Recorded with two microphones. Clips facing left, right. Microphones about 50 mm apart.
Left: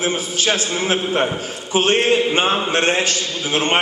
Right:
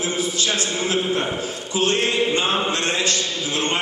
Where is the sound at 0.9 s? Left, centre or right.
Left.